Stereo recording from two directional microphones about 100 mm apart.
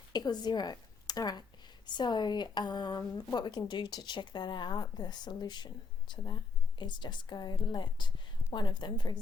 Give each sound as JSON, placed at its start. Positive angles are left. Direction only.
{"t": 0.1, "sound": "a woman's voice", "side_deg": 45}